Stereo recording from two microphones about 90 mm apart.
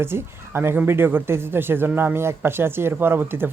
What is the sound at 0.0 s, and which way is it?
Speech, 25° right (ahead or behind).